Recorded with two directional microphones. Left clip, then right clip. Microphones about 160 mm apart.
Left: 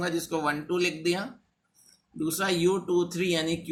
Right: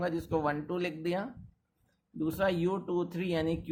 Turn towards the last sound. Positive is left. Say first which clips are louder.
# left 5 dB
turn(degrees=-35)  # may be behind; listen again after turning